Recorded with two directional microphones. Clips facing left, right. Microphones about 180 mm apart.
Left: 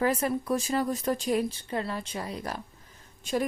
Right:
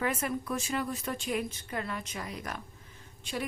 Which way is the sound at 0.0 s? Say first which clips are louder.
Left 5 dB; 35° left (ahead or behind).